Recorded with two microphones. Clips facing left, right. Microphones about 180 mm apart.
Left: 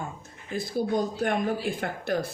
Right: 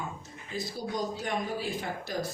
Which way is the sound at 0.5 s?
55° left (ahead or behind).